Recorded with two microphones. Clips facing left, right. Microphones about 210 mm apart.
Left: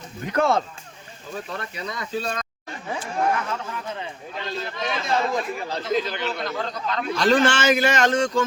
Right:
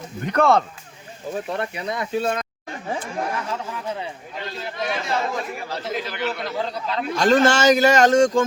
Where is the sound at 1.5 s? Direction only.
25° right (ahead or behind).